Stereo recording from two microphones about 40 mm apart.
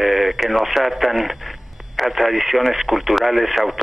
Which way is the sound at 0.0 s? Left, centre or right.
Centre.